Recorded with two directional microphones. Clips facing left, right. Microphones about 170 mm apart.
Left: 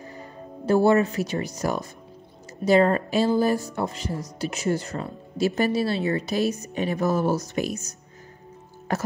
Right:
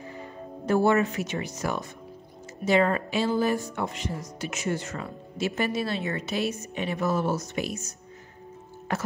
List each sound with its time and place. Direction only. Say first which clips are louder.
0.0 s music: right 1 dB; 40° left (ahead or behind)
0.8 s speech: left 3 dB; 35° left (ahead or behind)
8.9 s speech: left 3 dB; 40° left (ahead or behind)